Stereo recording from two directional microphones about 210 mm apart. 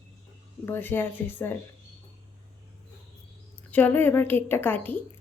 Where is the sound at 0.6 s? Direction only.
10° left (ahead or behind).